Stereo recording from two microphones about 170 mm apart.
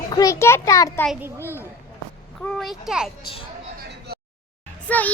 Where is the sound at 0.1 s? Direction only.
20° left (ahead or behind).